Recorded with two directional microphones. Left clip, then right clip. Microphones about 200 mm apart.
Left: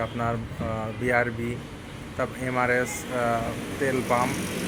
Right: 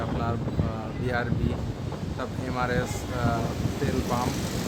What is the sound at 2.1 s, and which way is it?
Speech, 15° left (ahead or behind).